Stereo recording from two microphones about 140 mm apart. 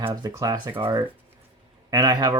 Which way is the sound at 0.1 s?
25° right (ahead or behind).